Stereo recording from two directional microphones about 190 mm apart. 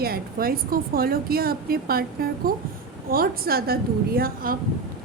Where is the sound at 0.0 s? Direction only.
50° right (ahead or behind).